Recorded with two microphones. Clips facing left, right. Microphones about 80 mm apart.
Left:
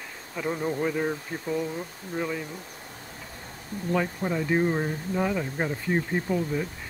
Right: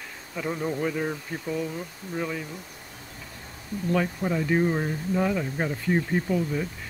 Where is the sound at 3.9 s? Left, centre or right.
Centre.